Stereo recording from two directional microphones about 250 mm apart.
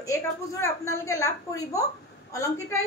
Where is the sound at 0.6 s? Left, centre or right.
Centre.